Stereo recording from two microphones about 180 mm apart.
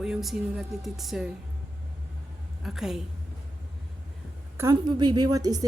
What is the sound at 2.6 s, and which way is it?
Speech, centre (ahead or behind).